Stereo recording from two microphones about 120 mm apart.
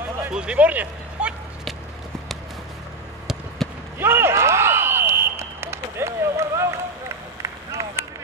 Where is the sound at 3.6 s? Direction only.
5° left (ahead or behind).